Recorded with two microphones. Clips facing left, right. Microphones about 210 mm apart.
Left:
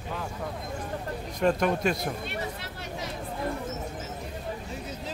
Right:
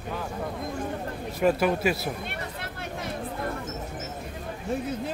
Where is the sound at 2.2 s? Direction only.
55° right (ahead or behind).